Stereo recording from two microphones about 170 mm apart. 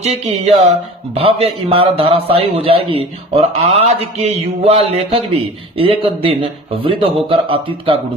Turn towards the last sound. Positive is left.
turn(degrees=-30)  # may be behind; listen again after turning